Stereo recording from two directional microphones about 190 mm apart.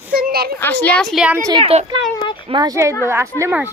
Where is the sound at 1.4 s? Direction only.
30° right (ahead or behind).